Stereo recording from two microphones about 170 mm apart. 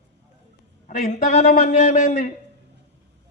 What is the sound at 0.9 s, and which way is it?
A man's voice, 50° left (ahead or behind).